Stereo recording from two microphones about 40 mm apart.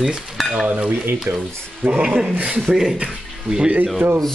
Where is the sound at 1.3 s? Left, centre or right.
Right.